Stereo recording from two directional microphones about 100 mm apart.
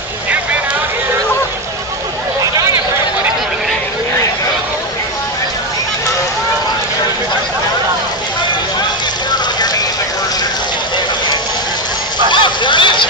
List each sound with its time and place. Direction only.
12.3 s vehicle: 50° left (ahead or behind)